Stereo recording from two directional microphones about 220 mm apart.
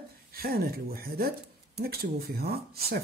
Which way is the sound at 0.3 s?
45° right (ahead or behind).